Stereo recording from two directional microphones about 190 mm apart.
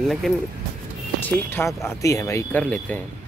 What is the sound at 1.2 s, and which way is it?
Speech, 10° left (ahead or behind).